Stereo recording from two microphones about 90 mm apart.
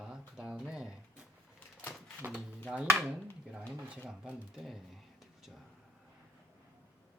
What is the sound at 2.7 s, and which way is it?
Speech, 10° right (ahead or behind).